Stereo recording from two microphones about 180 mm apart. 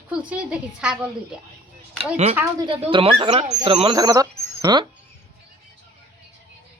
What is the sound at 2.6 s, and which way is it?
Speech, 30° right (ahead or behind).